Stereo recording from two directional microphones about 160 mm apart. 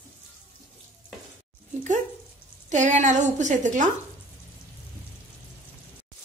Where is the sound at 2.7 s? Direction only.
50° right (ahead or behind).